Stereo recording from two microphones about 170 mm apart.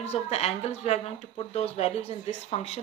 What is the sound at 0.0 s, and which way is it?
A woman's voice, 35° left (ahead or behind).